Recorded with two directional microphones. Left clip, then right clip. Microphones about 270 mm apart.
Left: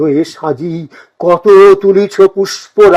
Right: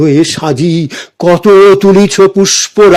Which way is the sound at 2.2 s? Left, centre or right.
Centre.